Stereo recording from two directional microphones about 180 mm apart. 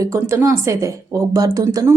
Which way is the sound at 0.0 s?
15° right (ahead or behind).